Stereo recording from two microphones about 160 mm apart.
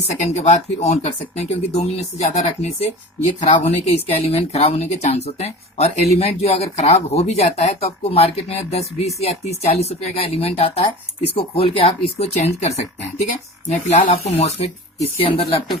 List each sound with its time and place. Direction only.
0.2 s speech: 45° left (ahead or behind)